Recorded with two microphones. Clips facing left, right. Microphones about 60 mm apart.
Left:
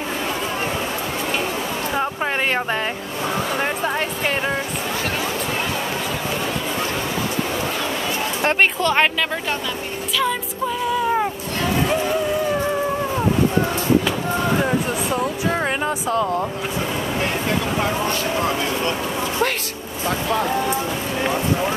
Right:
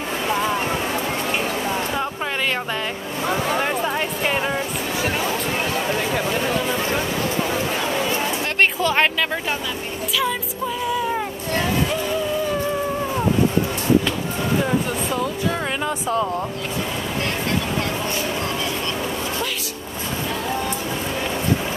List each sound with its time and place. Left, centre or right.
3.5 s speech: centre
8.5 s speech: centre
15.5 s a sound: left
17.2 s speech: centre